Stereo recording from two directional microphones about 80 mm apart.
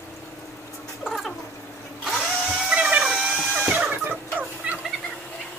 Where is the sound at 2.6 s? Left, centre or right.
Centre.